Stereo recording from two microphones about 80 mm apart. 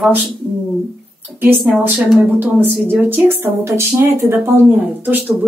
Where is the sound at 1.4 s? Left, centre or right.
Centre.